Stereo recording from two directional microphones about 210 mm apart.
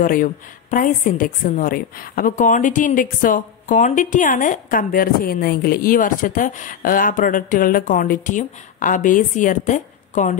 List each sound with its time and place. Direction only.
0.0 s a woman's voice: 40° left (ahead or behind)